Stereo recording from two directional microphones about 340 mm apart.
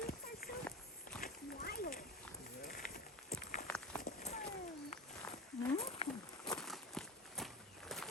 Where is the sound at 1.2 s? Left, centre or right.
Left.